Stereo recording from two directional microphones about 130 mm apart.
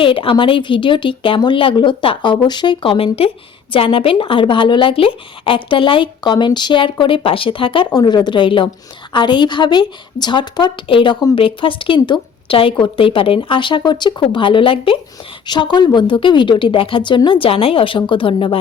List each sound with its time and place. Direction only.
0.0 s speech: 40° left (ahead or behind)